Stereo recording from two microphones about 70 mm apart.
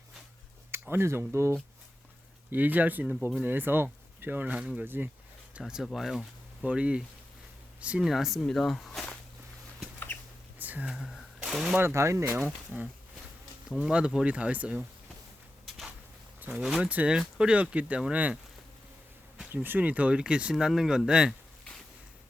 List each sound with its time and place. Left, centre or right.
0.7 s a sound: right
1.3 s speech: right
2.5 s speech: right
5.8 s speech: centre
6.7 s speech: centre
8.0 s speech: centre
10.1 s chicken: left
10.6 s a sound: right
10.8 s speech: centre
11.8 s speech: right
12.7 s speech: right
16.6 s speech: centre
16.8 s speech: centre
19.6 s speech: right; by 21.3 s centre